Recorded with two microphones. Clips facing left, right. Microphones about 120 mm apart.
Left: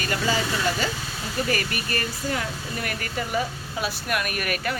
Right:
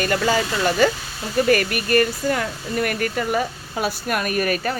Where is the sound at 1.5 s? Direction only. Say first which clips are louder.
Right 9 dB; 55° right (ahead or behind); by 4.8 s 35° right (ahead or behind).